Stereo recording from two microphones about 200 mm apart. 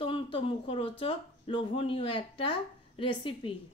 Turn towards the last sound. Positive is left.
turn(degrees=25)  # may be behind; listen again after turning